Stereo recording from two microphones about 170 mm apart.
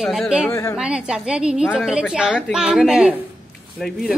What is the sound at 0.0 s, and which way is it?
Speech, centre (ahead or behind).